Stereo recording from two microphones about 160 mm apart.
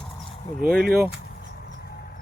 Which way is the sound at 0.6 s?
65° right (ahead or behind).